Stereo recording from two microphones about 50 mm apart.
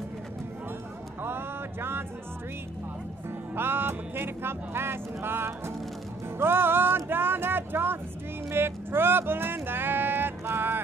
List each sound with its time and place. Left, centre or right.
1.2 s music: right
3.3 s speech: right
10.4 s music: right